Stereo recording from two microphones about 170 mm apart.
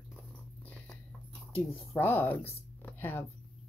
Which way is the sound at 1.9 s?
10° left (ahead or behind).